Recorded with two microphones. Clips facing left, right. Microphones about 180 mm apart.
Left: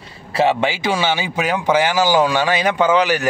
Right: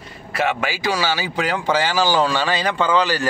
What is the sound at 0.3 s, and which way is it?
A man's voice, 30° left (ahead or behind).